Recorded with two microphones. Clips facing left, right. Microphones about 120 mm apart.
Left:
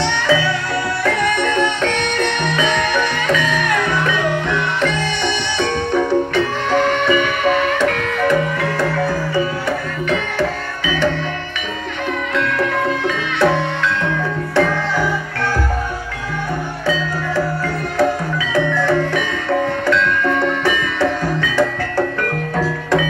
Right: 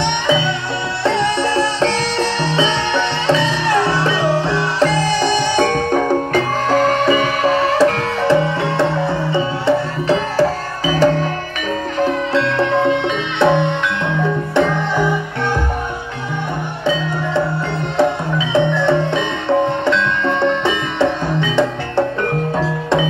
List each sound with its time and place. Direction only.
0.0 s music: 20° right (ahead or behind); by 11.2 s 40° right (ahead or behind)
12.0 s music: 30° right (ahead or behind)
18.5 s music: 25° right (ahead or behind)